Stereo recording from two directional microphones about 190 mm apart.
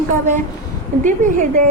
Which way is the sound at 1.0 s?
40° right (ahead or behind).